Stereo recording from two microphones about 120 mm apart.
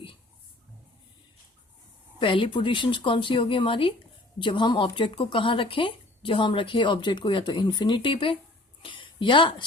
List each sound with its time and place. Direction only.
2.1 s a woman's voice: 45° left (ahead or behind)